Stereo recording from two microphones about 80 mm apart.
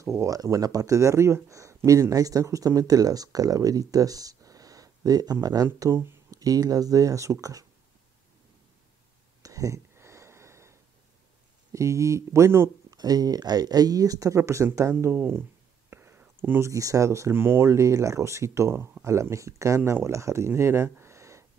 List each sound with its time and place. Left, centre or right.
0.0 s speech: right
5.8 s speech: right
6.3 s speech: right
9.4 s a sound: right
11.7 s speech: right
12.9 s speech: right
15.9 s a sound: right
16.7 s speech: right